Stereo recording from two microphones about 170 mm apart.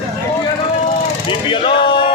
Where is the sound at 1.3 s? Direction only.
30° left (ahead or behind).